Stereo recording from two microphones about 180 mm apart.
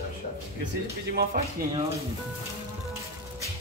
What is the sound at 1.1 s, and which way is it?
Speech, 55° right (ahead or behind).